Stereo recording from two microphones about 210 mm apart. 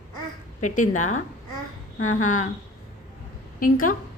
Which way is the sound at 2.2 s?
35° left (ahead or behind).